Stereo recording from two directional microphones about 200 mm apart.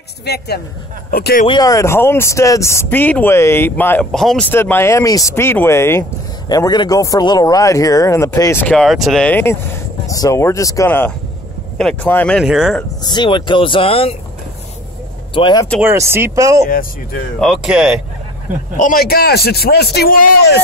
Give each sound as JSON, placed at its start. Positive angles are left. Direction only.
{"t": 0.2, "sound": "a man's voice", "side_deg": 55}
{"t": 1.5, "sound": "speech", "side_deg": 20}
{"t": 13.0, "sound": "speech", "side_deg": 20}
{"t": 15.3, "sound": "speech", "side_deg": 25}
{"t": 15.8, "sound": "speech", "side_deg": -10}
{"t": 16.6, "sound": "a man's voice", "side_deg": 45}
{"t": 17.4, "sound": "speech", "side_deg": 0}
{"t": 18.8, "sound": "a man's voice", "side_deg": 45}